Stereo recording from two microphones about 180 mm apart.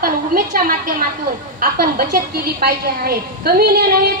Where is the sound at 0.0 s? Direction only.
50° right (ahead or behind).